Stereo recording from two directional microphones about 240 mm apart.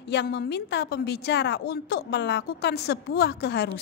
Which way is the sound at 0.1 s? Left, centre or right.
Left.